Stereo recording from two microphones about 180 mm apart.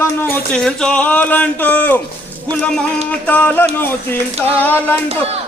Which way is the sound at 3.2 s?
10° left (ahead or behind).